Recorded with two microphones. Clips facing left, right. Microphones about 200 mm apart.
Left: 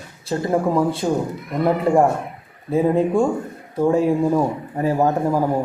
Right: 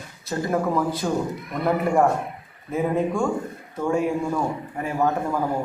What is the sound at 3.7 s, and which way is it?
Speech, 35° left (ahead or behind).